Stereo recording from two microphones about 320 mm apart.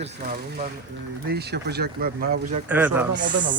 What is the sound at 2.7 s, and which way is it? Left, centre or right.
Speech, centre.